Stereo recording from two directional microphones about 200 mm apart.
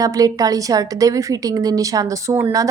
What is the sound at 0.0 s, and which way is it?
A woman's voice, 15° right (ahead or behind).